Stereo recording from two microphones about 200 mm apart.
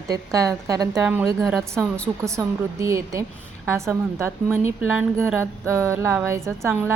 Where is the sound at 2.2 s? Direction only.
15° right (ahead or behind).